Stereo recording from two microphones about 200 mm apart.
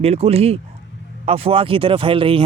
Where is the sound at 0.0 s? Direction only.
30° right (ahead or behind).